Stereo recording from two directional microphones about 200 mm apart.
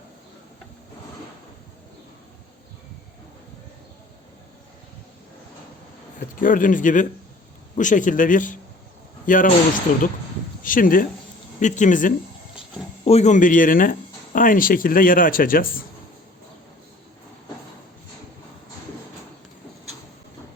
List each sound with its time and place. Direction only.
6.1 s speech: 40° left (ahead or behind)
10.6 s speech: 45° left (ahead or behind)